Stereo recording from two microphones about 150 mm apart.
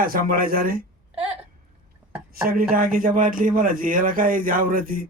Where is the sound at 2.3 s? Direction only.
80° right.